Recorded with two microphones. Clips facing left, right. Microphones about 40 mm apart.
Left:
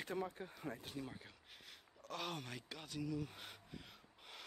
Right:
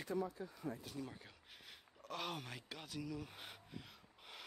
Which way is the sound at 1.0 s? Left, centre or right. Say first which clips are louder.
Even; centre.